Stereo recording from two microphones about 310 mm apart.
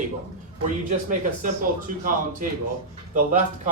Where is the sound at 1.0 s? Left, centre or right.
Right.